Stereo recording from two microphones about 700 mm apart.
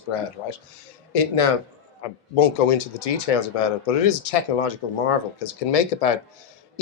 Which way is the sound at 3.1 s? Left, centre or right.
Left.